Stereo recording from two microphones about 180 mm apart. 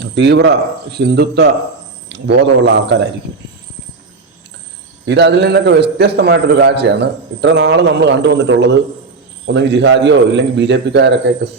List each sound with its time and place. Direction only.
0.0 s a man's voice: 75° right (ahead or behind)
5.0 s a man's voice: 70° right (ahead or behind)